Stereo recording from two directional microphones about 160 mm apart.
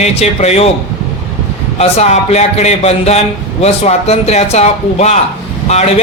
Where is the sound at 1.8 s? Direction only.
45° left (ahead or behind).